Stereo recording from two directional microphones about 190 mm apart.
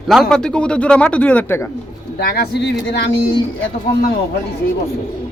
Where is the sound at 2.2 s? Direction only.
55° left (ahead or behind).